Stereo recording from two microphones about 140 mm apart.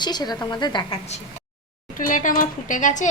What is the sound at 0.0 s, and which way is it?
Speech, 30° left (ahead or behind).